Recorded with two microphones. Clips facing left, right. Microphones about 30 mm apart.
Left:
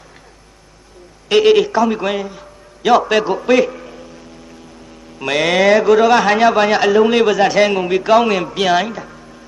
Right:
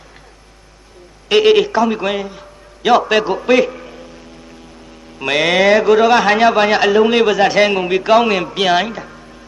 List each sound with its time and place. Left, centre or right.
1.3 s a man's voice: right
5.2 s a man's voice: right